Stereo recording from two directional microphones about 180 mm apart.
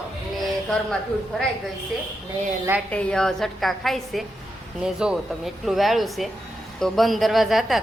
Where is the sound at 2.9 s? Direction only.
5° left (ahead or behind).